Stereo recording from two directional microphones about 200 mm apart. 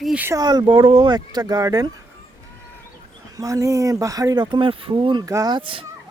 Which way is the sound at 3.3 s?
15° right (ahead or behind).